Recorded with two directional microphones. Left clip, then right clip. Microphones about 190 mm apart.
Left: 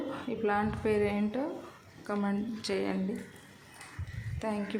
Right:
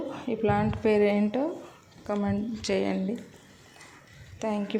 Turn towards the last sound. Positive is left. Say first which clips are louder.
# right 4 dB
turn(degrees=-15)  # may be behind; listen again after turning